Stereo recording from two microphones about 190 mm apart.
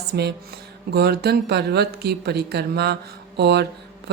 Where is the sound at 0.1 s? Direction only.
60° right (ahead or behind).